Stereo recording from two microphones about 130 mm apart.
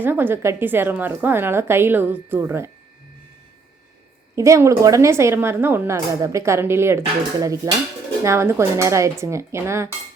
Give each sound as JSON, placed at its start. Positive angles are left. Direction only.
{"t": 0.0, "sound": "speech", "side_deg": -15}
{"t": 4.4, "sound": "a woman's voice", "side_deg": -25}